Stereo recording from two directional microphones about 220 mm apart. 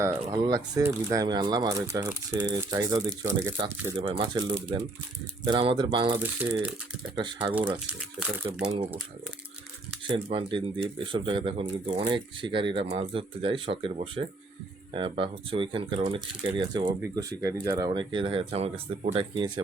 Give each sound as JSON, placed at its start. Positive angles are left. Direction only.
{"t": 0.0, "sound": "speech", "side_deg": -15}
{"t": 6.1, "sound": "speech", "side_deg": -5}
{"t": 7.2, "sound": "speech", "side_deg": -20}
{"t": 7.7, "sound": "speech", "side_deg": -5}
{"t": 10.0, "sound": "speech", "side_deg": -25}